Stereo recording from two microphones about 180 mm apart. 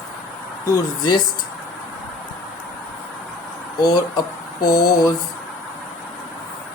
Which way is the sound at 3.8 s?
20° left (ahead or behind).